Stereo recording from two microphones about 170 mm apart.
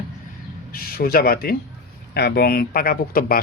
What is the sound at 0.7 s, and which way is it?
Speech, 60° left (ahead or behind).